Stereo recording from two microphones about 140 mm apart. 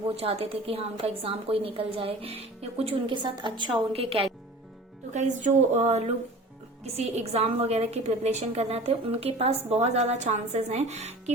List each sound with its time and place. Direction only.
0.2 s a woman's voice: 45° right (ahead or behind)
5.1 s a woman's voice: 55° right (ahead or behind)